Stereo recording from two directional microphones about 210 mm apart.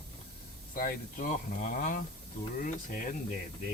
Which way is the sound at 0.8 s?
40° left (ahead or behind).